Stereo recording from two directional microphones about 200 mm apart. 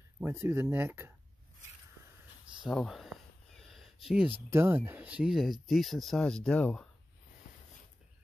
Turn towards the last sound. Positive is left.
turn(degrees=45)  # may be behind; listen again after turning